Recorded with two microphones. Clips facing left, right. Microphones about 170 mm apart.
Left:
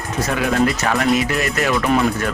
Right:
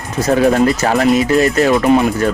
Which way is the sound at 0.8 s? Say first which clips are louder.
Right 5 dB; 35° right (ahead or behind).